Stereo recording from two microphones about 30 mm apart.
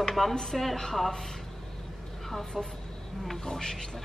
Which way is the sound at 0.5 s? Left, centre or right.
Centre.